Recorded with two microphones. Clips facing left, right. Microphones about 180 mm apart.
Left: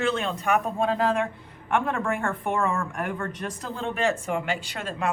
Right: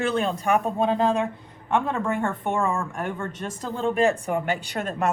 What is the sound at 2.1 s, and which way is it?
Speech, 20° right (ahead or behind).